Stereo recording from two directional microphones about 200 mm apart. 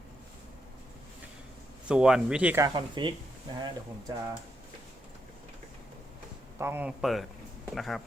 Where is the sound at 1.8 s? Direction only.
5° right (ahead or behind).